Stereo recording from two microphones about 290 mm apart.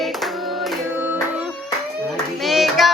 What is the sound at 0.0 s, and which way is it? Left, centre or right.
Singing, centre.